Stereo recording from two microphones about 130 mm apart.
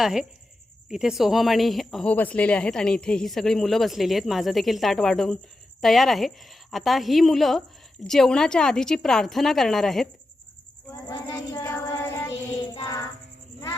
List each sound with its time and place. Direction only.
0.0 s speech: 5° right (ahead or behind)
11.1 s child singing: 25° left (ahead or behind)